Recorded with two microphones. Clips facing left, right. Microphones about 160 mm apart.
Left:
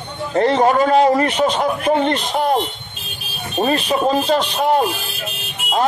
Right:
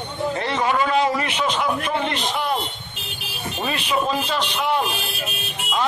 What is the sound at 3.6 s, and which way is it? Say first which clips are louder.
A man's voice: left 7 dB; 45° left (ahead or behind).